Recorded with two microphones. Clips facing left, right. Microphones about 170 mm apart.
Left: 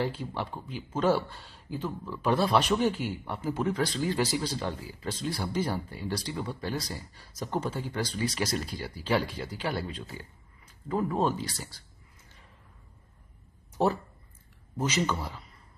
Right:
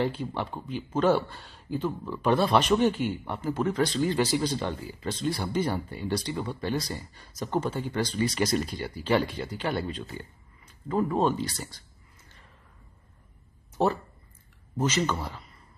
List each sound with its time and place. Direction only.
0.0 s speech: 5° left (ahead or behind)
1.9 s speech: 20° right (ahead or behind)
2.2 s speech: 5° left (ahead or behind)
14.9 s a man's voice: 5° left (ahead or behind)